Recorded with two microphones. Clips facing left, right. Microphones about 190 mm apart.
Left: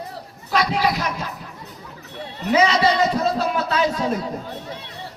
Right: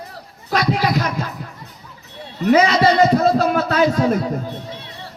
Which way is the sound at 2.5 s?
50° right (ahead or behind).